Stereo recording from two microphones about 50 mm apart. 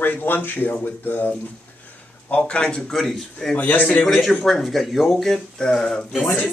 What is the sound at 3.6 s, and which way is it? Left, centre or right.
Speech, left.